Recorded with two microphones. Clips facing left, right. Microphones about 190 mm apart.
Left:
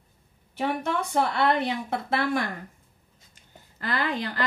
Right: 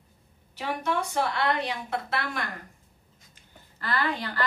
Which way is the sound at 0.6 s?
55° left (ahead or behind).